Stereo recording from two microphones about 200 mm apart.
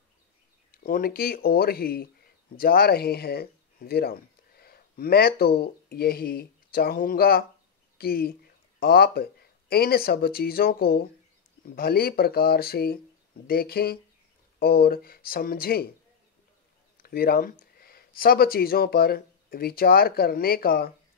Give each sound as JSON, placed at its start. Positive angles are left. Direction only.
{"t": 0.7, "sound": "speech", "side_deg": 45}
{"t": 16.9, "sound": "speech", "side_deg": 50}